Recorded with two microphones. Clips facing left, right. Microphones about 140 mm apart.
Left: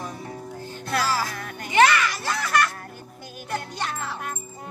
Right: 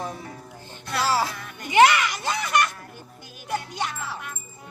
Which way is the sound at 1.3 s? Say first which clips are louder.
Left 2 dB; 55° left (ahead or behind).